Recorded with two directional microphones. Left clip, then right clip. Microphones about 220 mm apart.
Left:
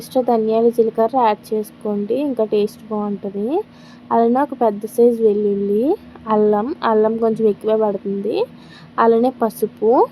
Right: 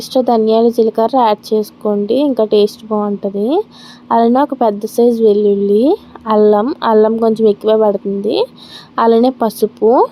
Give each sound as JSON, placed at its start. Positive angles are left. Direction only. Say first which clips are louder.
{"t": 0.0, "sound": "a woman's voice", "louder": "right 5 dB", "side_deg": -20}